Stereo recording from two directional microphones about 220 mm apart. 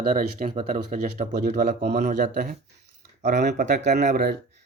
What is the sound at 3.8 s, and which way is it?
Speech, 30° right (ahead or behind).